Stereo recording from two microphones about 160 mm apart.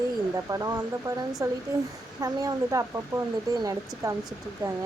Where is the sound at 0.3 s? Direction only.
20° right (ahead or behind).